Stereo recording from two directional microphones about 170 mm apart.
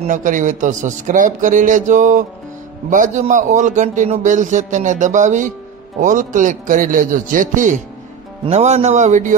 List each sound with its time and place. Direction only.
0.0 s a man's voice: 50° right (ahead or behind)